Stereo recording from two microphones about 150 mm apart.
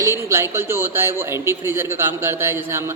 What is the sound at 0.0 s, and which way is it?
A man's voice, 20° right (ahead or behind).